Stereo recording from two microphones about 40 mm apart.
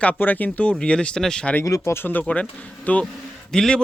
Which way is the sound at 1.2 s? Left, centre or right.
Centre.